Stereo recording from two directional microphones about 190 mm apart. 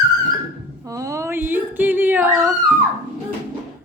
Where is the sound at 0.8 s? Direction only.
15° right (ahead or behind).